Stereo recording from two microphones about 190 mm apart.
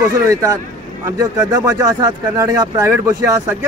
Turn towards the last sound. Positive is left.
turn(degrees=-15)  # may be behind; listen again after turning